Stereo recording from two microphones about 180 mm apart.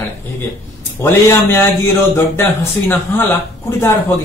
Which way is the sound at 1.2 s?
15° left (ahead or behind).